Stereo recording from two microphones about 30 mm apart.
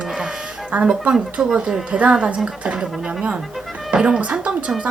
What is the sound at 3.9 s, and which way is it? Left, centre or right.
Speech, right.